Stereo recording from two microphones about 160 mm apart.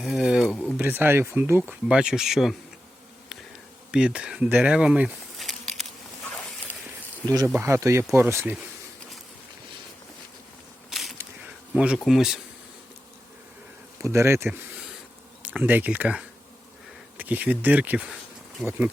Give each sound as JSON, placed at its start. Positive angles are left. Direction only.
{"t": 0.0, "sound": "speech", "side_deg": 0}
{"t": 0.8, "sound": "speech", "side_deg": -10}
{"t": 3.2, "sound": "insect", "side_deg": -5}
{"t": 6.3, "sound": "a sound", "side_deg": 10}
{"t": 7.3, "sound": "speech", "side_deg": -20}
{"t": 10.8, "sound": "a sound", "side_deg": 0}
{"t": 11.7, "sound": "speech", "side_deg": -5}
{"t": 14.0, "sound": "speech", "side_deg": -15}